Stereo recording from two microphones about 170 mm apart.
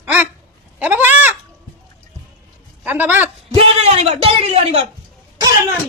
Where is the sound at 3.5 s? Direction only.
40° right (ahead or behind).